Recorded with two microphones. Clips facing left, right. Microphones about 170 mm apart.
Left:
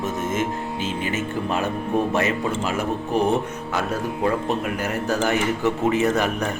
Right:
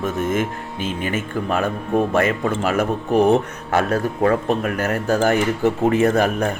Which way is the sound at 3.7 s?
70° right (ahead or behind).